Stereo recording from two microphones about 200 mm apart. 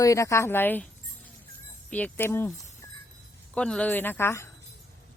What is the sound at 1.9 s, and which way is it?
Speech, 5° left (ahead or behind).